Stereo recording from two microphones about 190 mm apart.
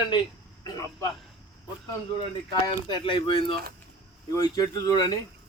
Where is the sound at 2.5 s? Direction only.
25° left (ahead or behind).